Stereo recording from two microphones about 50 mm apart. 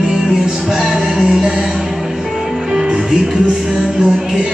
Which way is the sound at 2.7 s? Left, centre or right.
Centre.